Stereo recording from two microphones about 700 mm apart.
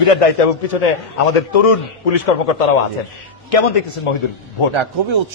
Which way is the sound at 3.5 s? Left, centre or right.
Left.